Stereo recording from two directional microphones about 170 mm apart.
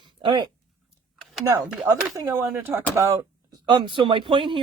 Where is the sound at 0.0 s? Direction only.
25° right (ahead or behind).